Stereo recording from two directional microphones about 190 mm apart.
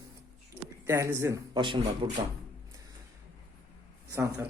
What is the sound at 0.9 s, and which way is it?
Speech, 15° right (ahead or behind).